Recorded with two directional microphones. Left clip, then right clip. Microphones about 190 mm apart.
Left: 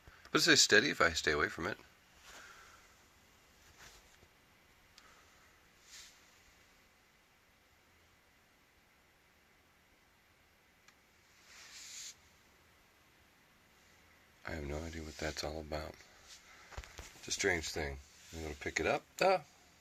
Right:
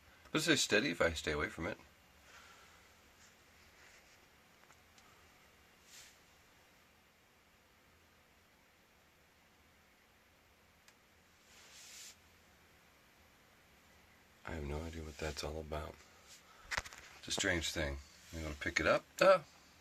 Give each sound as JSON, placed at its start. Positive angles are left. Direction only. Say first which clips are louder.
{"t": 0.3, "sound": "speech", "louder": "left 5 dB", "side_deg": 15}
{"t": 14.4, "sound": "a sound", "louder": "left 2 dB", "side_deg": 15}
{"t": 17.2, "sound": "speech", "louder": "left 1 dB", "side_deg": 15}